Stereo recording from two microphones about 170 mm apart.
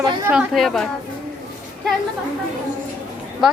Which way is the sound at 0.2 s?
10° right (ahead or behind).